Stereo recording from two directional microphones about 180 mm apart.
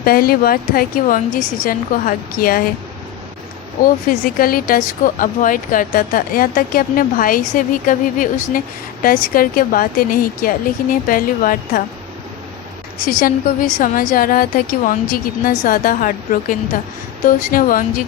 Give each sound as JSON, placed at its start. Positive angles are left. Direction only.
{"t": 0.0, "sound": "speech", "side_deg": 55}
{"t": 3.8, "sound": "speech", "side_deg": 55}
{"t": 13.1, "sound": "speech", "side_deg": 50}